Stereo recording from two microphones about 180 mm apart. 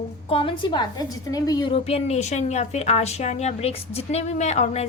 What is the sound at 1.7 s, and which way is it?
A woman's voice, 35° left (ahead or behind).